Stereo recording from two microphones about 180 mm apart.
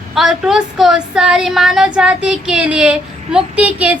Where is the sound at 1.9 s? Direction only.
5° right (ahead or behind).